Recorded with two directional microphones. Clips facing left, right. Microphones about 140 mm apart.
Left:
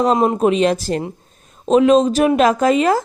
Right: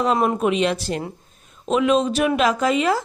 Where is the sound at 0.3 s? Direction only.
40° left (ahead or behind).